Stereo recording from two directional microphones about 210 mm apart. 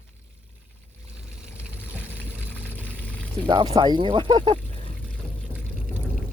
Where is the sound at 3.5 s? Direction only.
20° right (ahead or behind).